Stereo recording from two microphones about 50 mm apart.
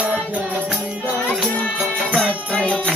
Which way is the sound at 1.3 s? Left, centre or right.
Centre.